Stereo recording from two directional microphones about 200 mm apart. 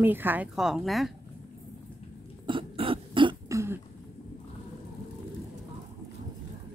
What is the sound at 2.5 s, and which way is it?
Cough, 25° right (ahead or behind).